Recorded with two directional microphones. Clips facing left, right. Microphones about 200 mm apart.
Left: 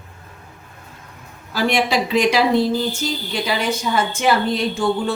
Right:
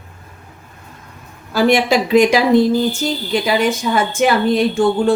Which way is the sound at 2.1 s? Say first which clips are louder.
Right 7 dB; 50° right (ahead or behind).